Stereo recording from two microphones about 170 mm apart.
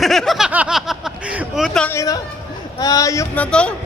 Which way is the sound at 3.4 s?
5° left (ahead or behind).